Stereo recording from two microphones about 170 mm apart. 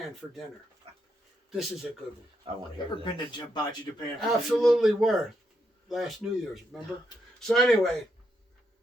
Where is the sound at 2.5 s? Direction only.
30° right (ahead or behind).